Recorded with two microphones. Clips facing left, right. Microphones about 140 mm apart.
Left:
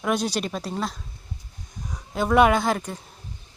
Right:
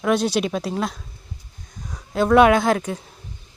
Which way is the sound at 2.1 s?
5° left (ahead or behind).